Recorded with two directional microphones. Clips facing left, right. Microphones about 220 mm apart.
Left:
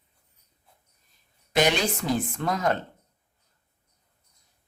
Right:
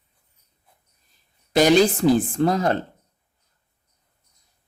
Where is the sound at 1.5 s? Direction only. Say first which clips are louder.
Right 8 dB; 35° right (ahead or behind).